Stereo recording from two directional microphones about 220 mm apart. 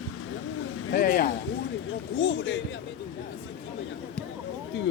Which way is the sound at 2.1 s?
60° left (ahead or behind).